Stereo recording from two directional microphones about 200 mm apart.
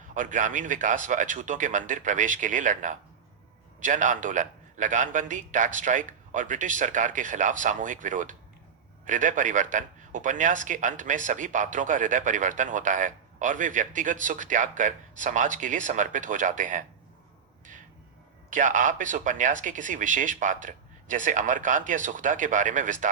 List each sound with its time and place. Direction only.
0.1 s a man's voice: 40° right (ahead or behind)
18.5 s a man's voice: 40° right (ahead or behind)